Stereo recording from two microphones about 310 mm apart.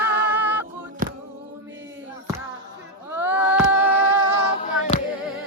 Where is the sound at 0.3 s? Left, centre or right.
Centre.